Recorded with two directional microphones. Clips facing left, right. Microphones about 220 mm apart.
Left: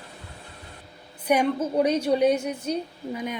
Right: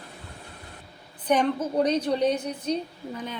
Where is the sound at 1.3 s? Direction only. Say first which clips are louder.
Left 1 dB; 10° left (ahead or behind).